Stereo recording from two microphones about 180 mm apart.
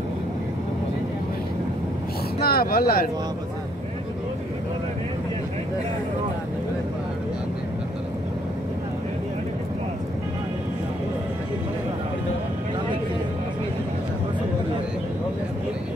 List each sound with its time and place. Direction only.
2.4 s speech: 60° left (ahead or behind)